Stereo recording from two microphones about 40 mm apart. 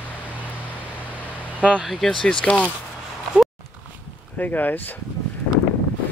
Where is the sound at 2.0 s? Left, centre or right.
Centre.